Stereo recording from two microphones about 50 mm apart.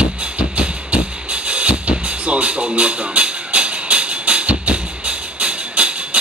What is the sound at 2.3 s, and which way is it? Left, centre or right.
Music, right.